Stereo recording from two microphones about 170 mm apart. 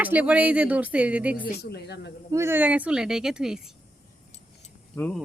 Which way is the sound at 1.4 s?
65° left (ahead or behind).